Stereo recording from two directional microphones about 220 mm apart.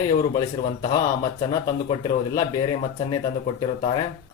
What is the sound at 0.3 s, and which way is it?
Speech, 15° left (ahead or behind).